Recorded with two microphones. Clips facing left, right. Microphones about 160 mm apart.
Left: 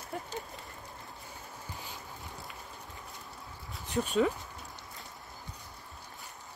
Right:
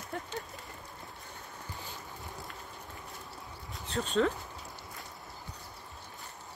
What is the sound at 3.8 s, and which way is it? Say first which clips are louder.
Speech: left 1 dB; 10° left (ahead or behind).